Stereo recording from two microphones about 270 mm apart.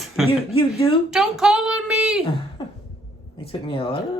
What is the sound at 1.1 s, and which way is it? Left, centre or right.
Speech, centre.